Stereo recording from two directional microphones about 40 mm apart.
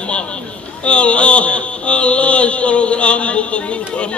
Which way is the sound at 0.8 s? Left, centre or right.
Left.